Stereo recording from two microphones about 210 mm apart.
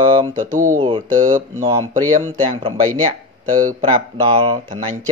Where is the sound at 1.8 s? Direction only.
35° right (ahead or behind).